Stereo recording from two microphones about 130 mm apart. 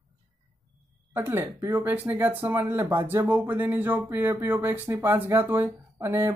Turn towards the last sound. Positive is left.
turn(degrees=-20)  # may be behind; listen again after turning